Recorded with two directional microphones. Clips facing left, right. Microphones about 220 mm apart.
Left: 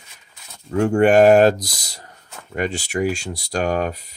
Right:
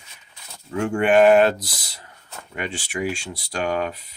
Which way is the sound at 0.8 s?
40° left (ahead or behind).